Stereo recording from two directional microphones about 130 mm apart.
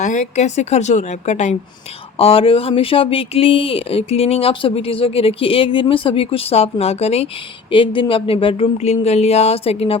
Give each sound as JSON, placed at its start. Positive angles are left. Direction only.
{"t": 0.0, "sound": "a woman's voice", "side_deg": 70}
{"t": 2.1, "sound": "speech", "side_deg": 45}
{"t": 7.7, "sound": "speech", "side_deg": 40}